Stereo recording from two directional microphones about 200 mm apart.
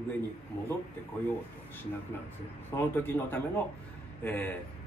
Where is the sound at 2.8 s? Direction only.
10° left (ahead or behind).